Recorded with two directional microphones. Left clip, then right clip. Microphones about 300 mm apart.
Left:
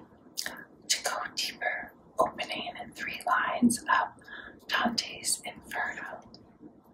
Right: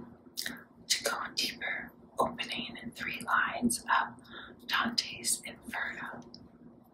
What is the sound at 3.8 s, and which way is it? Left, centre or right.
Speech, centre.